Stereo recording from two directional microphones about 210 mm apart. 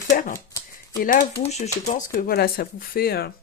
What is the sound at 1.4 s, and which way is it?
Speech, 30° left (ahead or behind).